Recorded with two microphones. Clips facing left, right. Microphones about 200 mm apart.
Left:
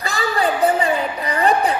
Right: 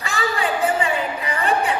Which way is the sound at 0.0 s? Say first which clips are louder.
Left 3 dB; 40° left (ahead or behind).